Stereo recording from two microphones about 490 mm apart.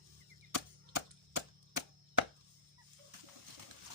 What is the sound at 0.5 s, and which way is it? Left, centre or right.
Chop, right.